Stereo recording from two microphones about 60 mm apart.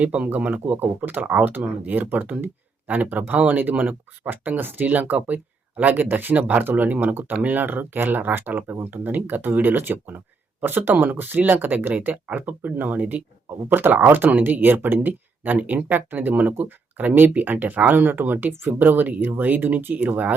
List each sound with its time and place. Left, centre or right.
0.0 s speech: right